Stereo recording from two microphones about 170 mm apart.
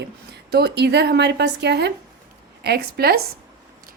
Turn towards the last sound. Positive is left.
turn(degrees=-65)  # may be behind; listen again after turning